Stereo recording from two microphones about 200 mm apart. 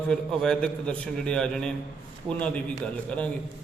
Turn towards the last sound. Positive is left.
turn(degrees=5)  # may be behind; listen again after turning